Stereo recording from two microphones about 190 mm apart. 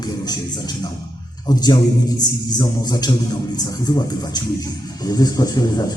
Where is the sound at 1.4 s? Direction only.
20° left (ahead or behind).